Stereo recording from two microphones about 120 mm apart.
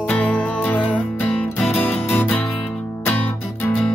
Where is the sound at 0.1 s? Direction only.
10° left (ahead or behind).